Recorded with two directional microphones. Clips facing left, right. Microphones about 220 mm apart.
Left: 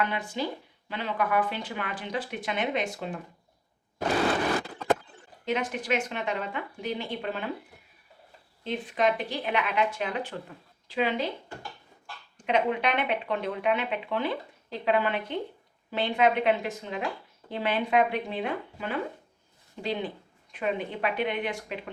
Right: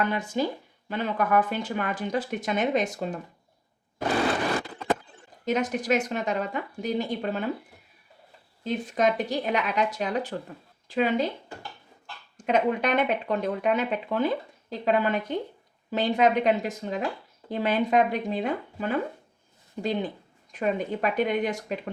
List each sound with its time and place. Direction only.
0.0 s speech: 45° right (ahead or behind)
5.5 s a woman's voice: 40° right (ahead or behind)
8.6 s a woman's voice: 45° right (ahead or behind)
12.5 s a woman's voice: 45° right (ahead or behind)